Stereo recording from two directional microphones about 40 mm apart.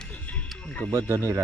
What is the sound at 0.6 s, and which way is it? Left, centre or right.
Speech, left.